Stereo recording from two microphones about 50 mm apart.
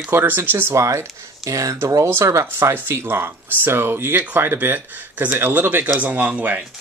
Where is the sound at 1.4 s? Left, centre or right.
Right.